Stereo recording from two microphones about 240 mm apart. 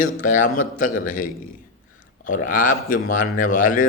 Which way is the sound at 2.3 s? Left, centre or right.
Left.